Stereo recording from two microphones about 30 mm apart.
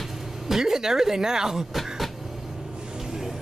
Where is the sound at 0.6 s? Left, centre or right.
Centre.